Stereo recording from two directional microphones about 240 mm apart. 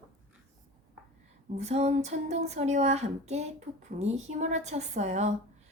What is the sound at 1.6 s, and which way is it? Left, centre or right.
A woman's voice, right.